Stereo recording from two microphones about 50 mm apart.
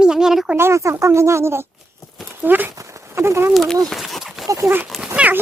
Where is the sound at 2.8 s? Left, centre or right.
Right.